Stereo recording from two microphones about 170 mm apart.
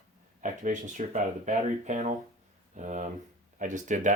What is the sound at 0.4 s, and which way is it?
Speech, 45° right (ahead or behind).